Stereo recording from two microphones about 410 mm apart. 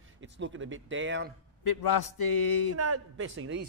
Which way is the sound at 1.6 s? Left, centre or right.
Left.